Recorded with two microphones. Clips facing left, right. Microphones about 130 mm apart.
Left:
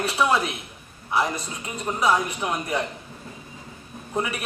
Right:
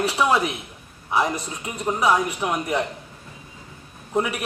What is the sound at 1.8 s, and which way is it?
Speech, 15° right (ahead or behind).